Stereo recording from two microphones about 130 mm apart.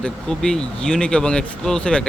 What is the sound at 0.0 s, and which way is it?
Speech, 5° left (ahead or behind).